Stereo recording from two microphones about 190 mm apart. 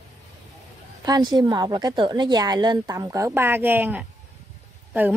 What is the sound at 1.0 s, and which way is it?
A woman's voice, 20° right (ahead or behind).